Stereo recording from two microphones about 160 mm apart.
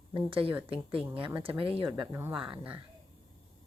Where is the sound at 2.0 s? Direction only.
15° right (ahead or behind).